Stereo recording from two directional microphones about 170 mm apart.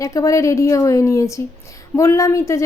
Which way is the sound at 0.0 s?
20° left (ahead or behind).